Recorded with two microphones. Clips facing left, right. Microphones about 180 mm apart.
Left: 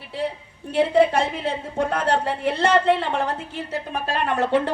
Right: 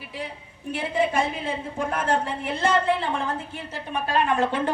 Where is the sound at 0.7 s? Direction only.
65° left (ahead or behind).